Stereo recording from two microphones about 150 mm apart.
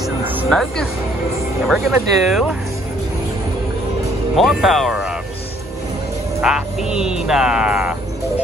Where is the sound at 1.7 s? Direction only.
Centre (ahead or behind).